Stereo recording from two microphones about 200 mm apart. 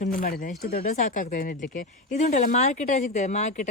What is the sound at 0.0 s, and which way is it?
Speech, 45° left (ahead or behind).